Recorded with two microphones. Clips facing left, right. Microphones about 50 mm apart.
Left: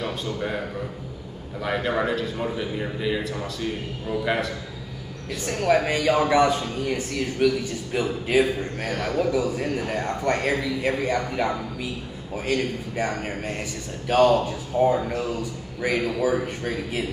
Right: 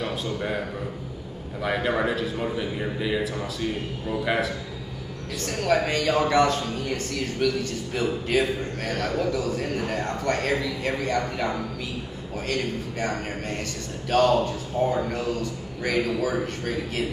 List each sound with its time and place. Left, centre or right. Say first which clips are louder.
0.0 s a man's voice: even; centre
5.4 s a man's voice: left 2 dB; centre